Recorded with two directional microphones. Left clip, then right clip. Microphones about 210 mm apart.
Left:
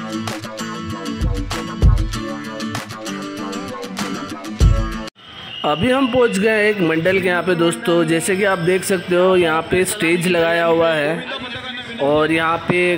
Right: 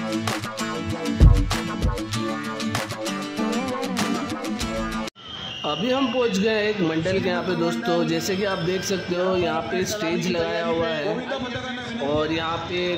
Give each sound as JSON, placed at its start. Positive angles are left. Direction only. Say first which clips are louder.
{"t": 4.0, "sound": "music", "louder": "even", "side_deg": 0}
{"t": 5.6, "sound": "speech", "louder": "left 7 dB", "side_deg": 25}